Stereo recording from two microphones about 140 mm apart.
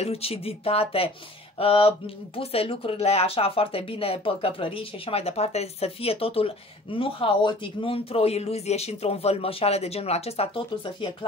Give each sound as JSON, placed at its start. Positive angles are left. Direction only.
{"t": 0.0, "sound": "speech", "side_deg": 45}